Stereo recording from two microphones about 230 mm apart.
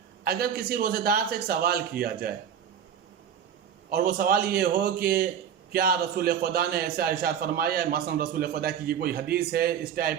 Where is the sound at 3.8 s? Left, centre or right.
Right.